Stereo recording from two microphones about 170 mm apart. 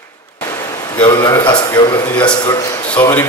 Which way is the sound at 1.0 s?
30° left (ahead or behind).